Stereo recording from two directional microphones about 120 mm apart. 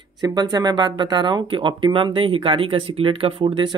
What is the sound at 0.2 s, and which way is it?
Speech, 35° right (ahead or behind).